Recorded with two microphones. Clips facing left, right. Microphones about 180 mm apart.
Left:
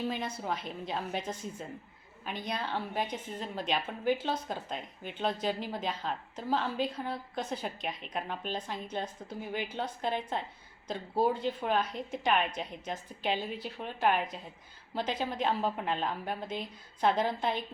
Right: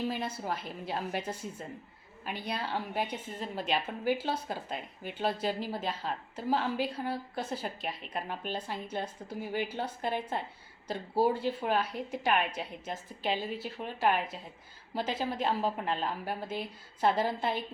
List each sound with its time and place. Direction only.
0.1 s a woman's voice: 5° right (ahead or behind)